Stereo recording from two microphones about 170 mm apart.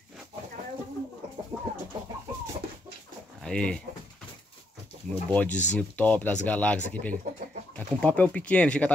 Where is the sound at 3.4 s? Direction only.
5° left (ahead or behind).